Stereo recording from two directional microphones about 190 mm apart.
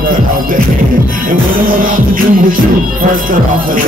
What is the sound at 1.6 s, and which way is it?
Music, 45° right (ahead or behind).